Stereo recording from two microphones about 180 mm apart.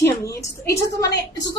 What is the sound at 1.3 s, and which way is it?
Speech, 70° left (ahead or behind).